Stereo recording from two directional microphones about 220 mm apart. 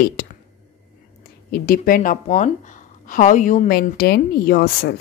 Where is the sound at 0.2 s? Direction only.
45° left (ahead or behind).